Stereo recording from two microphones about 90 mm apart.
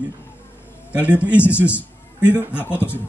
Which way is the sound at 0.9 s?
15° right (ahead or behind).